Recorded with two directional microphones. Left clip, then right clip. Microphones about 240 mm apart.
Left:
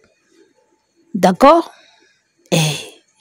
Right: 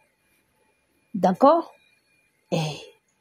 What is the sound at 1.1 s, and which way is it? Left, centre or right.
Speech, left.